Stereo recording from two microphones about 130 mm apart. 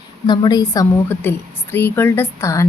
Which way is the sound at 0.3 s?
35° left (ahead or behind).